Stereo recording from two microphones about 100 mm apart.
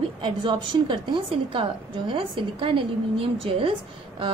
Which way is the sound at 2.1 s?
60° right (ahead or behind).